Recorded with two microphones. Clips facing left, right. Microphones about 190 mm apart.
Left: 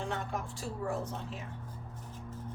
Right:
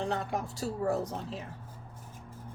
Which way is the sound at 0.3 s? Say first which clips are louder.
Right 4 dB; 40° right (ahead or behind).